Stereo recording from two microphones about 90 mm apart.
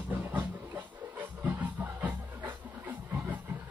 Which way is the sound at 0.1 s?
20° right (ahead or behind).